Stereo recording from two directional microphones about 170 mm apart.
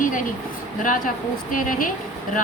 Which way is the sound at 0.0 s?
50° left (ahead or behind).